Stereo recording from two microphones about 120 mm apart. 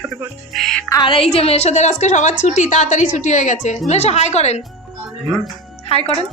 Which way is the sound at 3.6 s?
75° left (ahead or behind).